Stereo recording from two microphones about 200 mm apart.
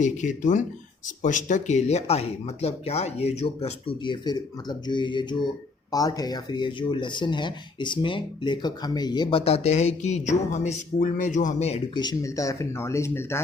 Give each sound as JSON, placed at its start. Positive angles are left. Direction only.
{"t": 0.0, "sound": "speech", "side_deg": 40}